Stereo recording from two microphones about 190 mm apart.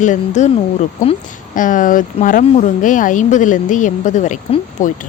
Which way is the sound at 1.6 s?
45° left (ahead or behind).